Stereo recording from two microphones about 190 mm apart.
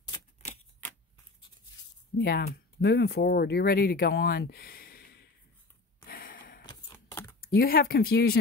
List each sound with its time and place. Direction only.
2.1 s speech: 55° left (ahead or behind)
6.0 s gasp: 50° left (ahead or behind)
6.6 s a sound: 20° left (ahead or behind)
7.3 s speech: 50° left (ahead or behind)